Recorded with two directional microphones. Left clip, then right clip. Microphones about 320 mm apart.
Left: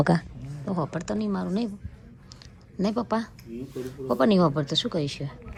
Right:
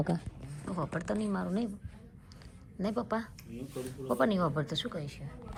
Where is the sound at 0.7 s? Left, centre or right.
Centre.